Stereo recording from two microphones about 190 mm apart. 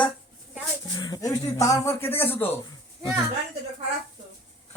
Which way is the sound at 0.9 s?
20° left (ahead or behind).